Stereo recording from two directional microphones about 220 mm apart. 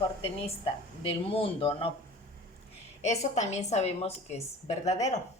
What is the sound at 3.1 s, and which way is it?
A woman's voice, 30° left (ahead or behind).